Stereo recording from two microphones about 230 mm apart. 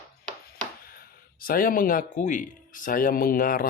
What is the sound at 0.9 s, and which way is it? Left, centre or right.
A man's voice, left.